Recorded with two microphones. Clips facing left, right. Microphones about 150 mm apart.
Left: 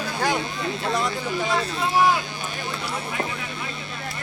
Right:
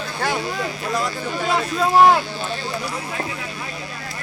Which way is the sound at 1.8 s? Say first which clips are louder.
Right 7 dB; 90° right.